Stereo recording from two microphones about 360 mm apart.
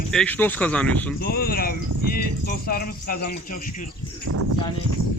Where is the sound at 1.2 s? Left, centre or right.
Left.